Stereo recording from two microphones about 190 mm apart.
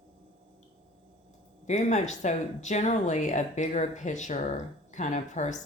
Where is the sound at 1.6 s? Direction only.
40° left (ahead or behind).